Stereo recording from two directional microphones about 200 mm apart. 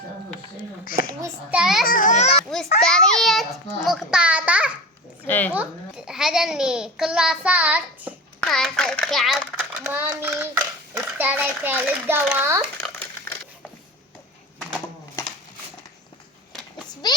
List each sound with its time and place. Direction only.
0.9 s a child's voice: 10° right (ahead or behind)
1.9 s baby cry: 40° left (ahead or behind)
2.8 s babbling: 5° left (ahead or behind)
5.2 s a sound: 10° left (ahead or behind)
6.1 s child singing: 5° right (ahead or behind)
8.4 s a sound: centre (ahead or behind)
9.8 s a child's voice: 10° right (ahead or behind)
17.0 s speech: 20° left (ahead or behind)